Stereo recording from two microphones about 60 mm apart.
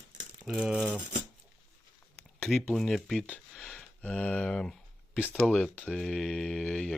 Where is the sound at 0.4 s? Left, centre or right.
Centre.